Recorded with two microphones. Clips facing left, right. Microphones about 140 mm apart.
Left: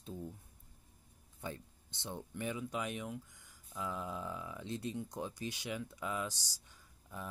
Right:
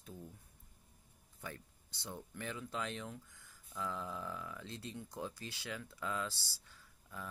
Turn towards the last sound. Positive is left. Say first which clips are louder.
# left 2 dB
turn(degrees=15)  # may be behind; listen again after turning